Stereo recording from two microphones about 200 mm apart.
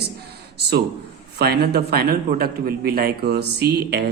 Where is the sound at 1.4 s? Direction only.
55° right (ahead or behind).